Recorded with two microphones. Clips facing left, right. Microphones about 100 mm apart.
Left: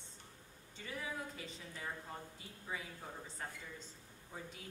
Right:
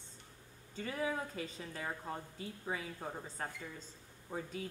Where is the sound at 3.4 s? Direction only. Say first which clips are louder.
Right 4 dB; 45° right (ahead or behind).